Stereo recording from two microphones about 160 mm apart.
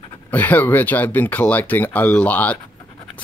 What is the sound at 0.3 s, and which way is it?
Speech, 10° left (ahead or behind).